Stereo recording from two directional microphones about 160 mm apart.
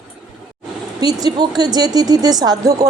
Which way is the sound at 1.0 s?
25° right (ahead or behind).